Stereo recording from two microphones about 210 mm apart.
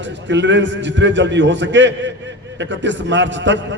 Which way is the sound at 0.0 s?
60° right (ahead or behind).